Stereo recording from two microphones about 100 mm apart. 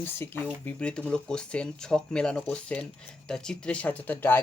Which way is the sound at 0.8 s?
10° left (ahead or behind).